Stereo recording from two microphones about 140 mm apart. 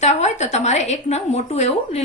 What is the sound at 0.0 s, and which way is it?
A woman's voice, 55° left (ahead or behind).